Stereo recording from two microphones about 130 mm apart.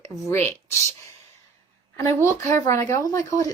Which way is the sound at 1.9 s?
20° left (ahead or behind).